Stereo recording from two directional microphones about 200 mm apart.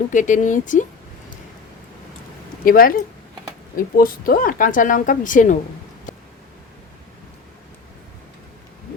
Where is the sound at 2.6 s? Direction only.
45° left (ahead or behind).